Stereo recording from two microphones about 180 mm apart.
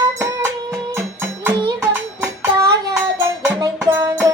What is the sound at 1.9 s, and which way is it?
Child singing, 15° right (ahead or behind).